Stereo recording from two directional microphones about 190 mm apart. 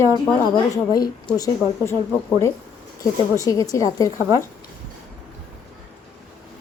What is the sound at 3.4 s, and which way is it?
Speech, 20° left (ahead or behind).